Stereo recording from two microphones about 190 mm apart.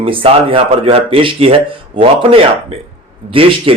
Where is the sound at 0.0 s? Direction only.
30° right (ahead or behind).